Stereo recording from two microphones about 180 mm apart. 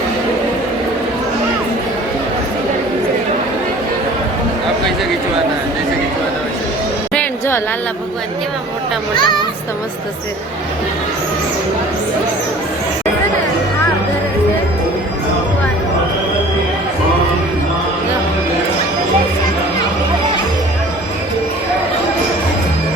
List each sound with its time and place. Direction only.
7.1 s music: 10° left (ahead or behind)
9.1 s speech: 25° left (ahead or behind)